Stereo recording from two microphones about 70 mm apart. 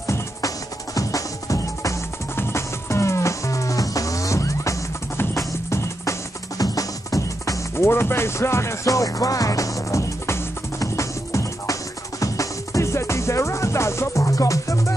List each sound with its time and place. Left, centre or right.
0.0 s music: left
2.3 s music: left
6.6 s music: left
7.7 s music: left